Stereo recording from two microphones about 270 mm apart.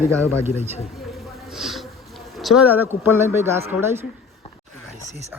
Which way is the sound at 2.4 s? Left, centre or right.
Centre.